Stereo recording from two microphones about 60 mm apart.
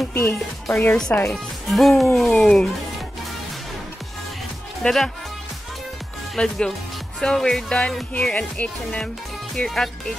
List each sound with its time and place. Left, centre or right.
0.1 s speech: left
1.1 s speech: centre
1.7 s speech: centre
4.8 s speech: centre
6.3 s speech: centre
9.7 s speech: centre